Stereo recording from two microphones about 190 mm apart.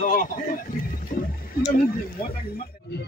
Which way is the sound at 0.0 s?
45° left (ahead or behind).